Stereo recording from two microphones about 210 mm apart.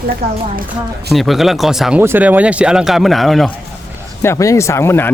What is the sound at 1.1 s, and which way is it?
Speech, centre (ahead or behind).